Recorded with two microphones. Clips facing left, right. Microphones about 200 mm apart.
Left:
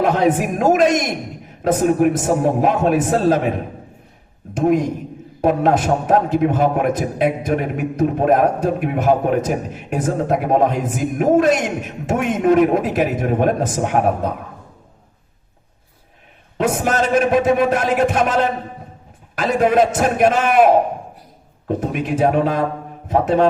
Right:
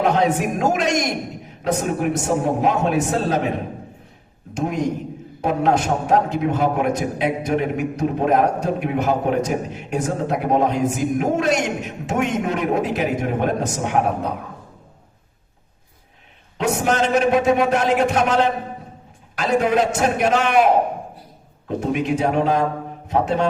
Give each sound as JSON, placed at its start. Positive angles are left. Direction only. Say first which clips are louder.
{"t": 0.0, "sound": "a man's voice", "louder": "left 2 dB", "side_deg": 50}
{"t": 4.5, "sound": "a man's voice", "louder": "left 5 dB", "side_deg": 55}
{"t": 16.6, "sound": "a man's voice", "louder": "left 1 dB", "side_deg": 50}
{"t": 21.8, "sound": "a man's voice", "louder": "even", "side_deg": 50}